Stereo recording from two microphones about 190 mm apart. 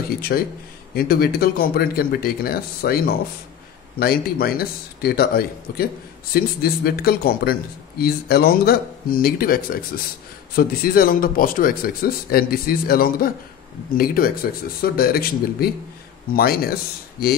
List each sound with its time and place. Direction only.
0.3 s speech: 55° left (ahead or behind)